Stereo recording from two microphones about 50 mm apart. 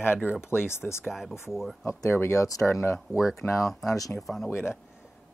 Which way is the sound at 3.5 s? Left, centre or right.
Centre.